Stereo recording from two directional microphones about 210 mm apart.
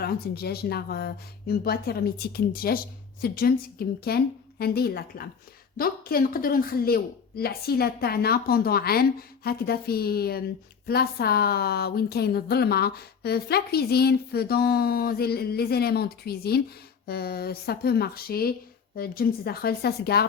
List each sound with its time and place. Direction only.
0.0 s a woman's voice: 50° left (ahead or behind)